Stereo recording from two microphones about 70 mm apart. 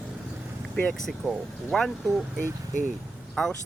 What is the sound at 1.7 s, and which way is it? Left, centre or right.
Speech, centre.